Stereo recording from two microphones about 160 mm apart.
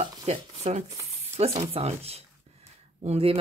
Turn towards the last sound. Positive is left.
turn(degrees=-40)  # may be behind; listen again after turning